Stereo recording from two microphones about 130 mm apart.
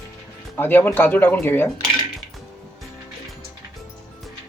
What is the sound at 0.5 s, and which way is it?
Speech, 15° left (ahead or behind).